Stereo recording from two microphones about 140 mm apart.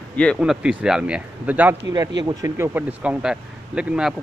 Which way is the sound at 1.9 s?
25° right (ahead or behind).